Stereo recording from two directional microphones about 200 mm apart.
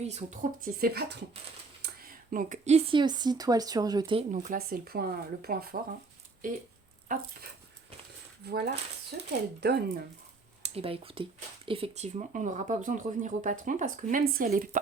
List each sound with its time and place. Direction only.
0.0 s speech: 35° right (ahead or behind); by 5.8 s 50° right (ahead or behind)
7.1 s speech: 40° right (ahead or behind)
8.4 s speech: 55° right (ahead or behind)
10.6 s speech: 30° right (ahead or behind)